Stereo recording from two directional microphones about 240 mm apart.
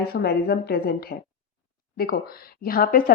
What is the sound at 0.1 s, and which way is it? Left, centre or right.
Speech, left.